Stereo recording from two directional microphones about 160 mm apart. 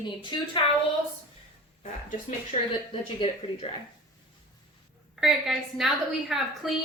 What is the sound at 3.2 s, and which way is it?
Speech, 30° left (ahead or behind).